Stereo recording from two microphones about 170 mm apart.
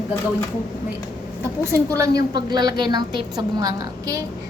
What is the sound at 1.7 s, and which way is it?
A woman's voice, 20° right (ahead or behind).